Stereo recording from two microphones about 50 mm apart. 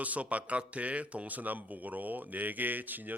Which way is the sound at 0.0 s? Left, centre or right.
Right.